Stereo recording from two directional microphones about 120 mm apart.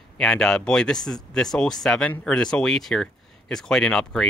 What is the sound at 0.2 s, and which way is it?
Speech, 5° left (ahead or behind).